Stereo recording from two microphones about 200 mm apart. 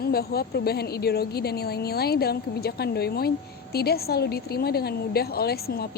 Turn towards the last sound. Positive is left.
turn(degrees=50)  # may be behind; listen again after turning